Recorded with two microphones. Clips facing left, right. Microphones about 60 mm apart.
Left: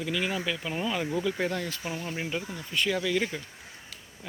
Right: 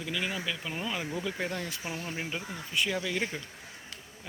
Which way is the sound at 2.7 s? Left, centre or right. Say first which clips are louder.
Left 4 dB; centre.